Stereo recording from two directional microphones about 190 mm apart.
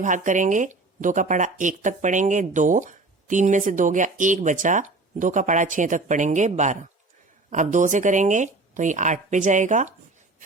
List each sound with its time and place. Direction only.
0.0 s speech: 40° right (ahead or behind)